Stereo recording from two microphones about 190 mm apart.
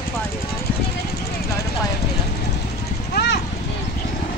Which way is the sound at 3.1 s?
60° left (ahead or behind).